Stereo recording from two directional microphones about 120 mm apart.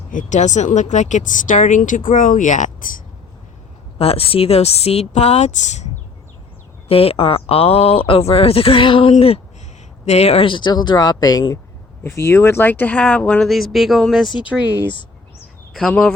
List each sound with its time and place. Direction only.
0.1 s speech: 90° left
3.9 s a woman's voice: 55° left (ahead or behind); by 5.9 s 75° left (ahead or behind)
6.8 s speech: 55° left (ahead or behind); by 11.4 s 35° left (ahead or behind)
12.0 s speech: 25° left (ahead or behind); by 14.3 s centre (ahead or behind)
15.7 s speech: 5° left (ahead or behind)